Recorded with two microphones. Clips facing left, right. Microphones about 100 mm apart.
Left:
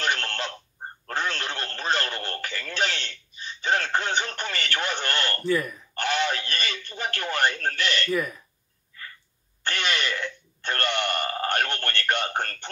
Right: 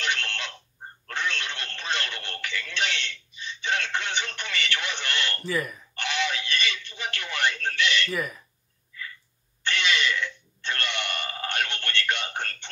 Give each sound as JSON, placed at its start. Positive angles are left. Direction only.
{"t": 0.0, "sound": "a sound", "side_deg": 40}
{"t": 1.0, "sound": "radio", "side_deg": 40}
{"t": 5.4, "sound": "speech", "side_deg": 0}
{"t": 5.9, "sound": "telephone", "side_deg": 45}
{"t": 8.1, "sound": "speech", "side_deg": 0}
{"t": 9.6, "sound": "a sound", "side_deg": 45}